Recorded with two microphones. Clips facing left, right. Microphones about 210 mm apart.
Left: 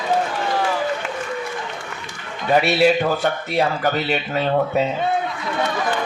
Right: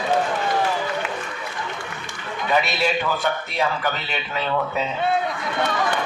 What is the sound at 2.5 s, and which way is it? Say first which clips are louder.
Speech: left 6 dB; 40° left (ahead or behind).